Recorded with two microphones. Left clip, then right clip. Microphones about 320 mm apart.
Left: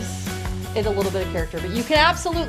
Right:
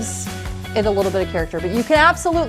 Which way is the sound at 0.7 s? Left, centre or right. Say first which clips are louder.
Right 5 dB; right.